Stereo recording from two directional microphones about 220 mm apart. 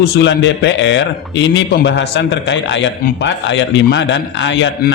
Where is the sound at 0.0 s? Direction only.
50° left (ahead or behind).